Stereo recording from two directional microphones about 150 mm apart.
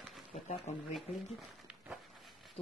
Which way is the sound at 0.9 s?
Centre (ahead or behind).